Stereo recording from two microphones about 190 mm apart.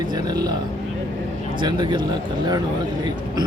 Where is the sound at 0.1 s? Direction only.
20° right (ahead or behind).